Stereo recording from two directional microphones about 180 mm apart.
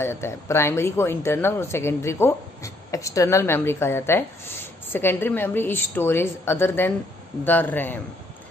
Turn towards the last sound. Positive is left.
turn(degrees=10)  # may be behind; listen again after turning